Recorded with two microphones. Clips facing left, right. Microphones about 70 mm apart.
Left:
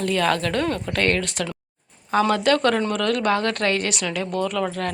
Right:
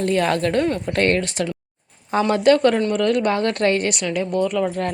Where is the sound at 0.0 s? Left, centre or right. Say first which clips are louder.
Right 2 dB; right.